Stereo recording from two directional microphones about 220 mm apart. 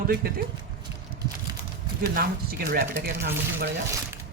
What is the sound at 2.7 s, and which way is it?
Speech, 40° right (ahead or behind).